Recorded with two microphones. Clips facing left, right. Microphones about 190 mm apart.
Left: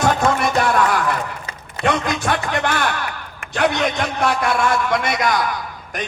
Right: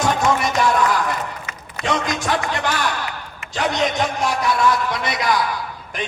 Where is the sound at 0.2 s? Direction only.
55° left (ahead or behind).